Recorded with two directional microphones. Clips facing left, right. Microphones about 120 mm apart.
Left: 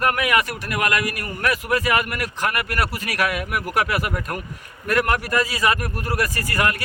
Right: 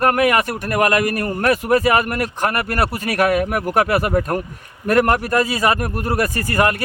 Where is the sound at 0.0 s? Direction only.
40° right (ahead or behind).